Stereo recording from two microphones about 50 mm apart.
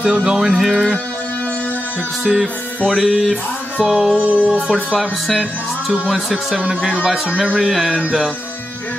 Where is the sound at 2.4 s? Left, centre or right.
Left.